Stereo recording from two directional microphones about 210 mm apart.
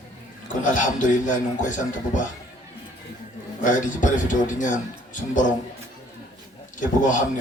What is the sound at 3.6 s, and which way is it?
A man's voice, 40° left (ahead or behind).